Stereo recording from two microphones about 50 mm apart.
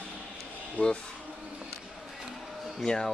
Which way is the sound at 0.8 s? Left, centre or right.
Left.